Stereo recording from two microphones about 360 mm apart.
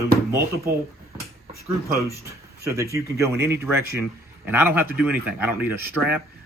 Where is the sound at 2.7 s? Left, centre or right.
Centre.